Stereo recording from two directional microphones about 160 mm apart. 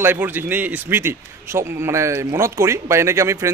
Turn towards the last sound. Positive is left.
turn(degrees=-15)  # may be behind; listen again after turning